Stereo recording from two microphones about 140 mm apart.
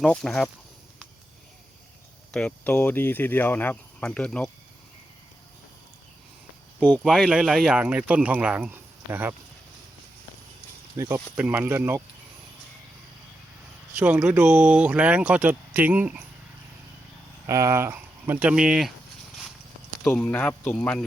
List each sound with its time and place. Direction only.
0.0 s speech: 5° left (ahead or behind)
2.3 s speech: 10° left (ahead or behind)
7.0 s speech: 5° right (ahead or behind)
10.9 s speech: 15° right (ahead or behind)
13.9 s speech: 10° right (ahead or behind)
17.4 s speech: 20° right (ahead or behind)
20.1 s speech: 10° left (ahead or behind)